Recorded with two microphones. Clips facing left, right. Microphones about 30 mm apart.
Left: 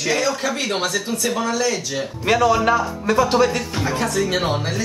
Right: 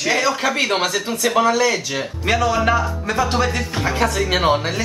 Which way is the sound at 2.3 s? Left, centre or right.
Centre.